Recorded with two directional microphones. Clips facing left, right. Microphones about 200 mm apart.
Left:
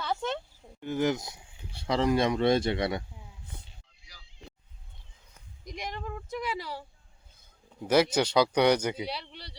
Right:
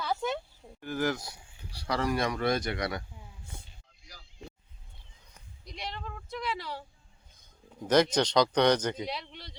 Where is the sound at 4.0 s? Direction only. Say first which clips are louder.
Right 7 dB; 45° right (ahead or behind).